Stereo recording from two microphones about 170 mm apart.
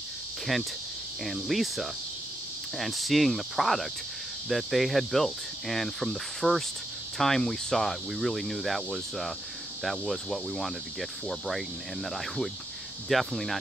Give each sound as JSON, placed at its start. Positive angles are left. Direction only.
{"t": 0.5, "sound": "cricket", "side_deg": 0}